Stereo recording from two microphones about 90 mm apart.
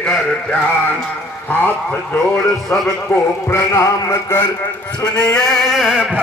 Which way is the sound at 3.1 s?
30° left (ahead or behind).